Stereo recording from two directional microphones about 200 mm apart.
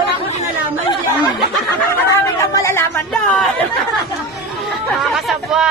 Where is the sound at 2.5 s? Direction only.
15° left (ahead or behind).